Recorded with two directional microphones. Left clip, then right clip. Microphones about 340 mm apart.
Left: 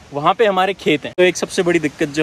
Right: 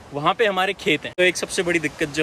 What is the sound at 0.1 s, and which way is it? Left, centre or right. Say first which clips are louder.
Speech: left 5 dB; centre.